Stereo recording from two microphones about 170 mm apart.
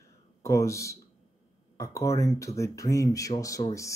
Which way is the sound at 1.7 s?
20° left (ahead or behind).